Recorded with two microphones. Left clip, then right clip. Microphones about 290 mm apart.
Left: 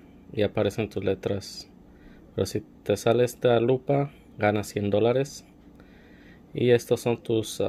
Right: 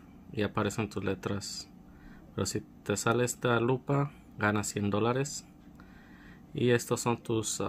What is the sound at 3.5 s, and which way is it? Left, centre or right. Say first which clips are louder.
Speech: left 7 dB; right.